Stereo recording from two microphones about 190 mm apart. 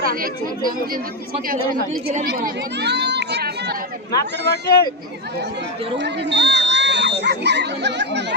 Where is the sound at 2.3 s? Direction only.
55° right (ahead or behind).